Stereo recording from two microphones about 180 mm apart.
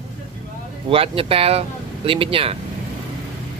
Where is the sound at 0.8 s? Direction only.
30° right (ahead or behind).